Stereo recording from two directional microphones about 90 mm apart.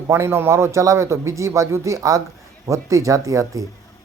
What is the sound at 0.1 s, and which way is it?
Speech, 30° right (ahead or behind).